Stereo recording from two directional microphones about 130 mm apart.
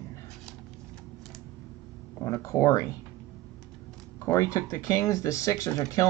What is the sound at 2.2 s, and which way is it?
Speech, 20° left (ahead or behind).